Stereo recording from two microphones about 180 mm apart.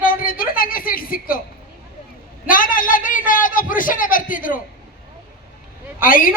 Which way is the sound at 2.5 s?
50° left (ahead or behind).